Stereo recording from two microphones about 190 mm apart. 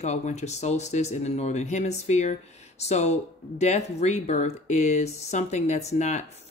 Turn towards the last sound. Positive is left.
turn(degrees=40)  # may be behind; listen again after turning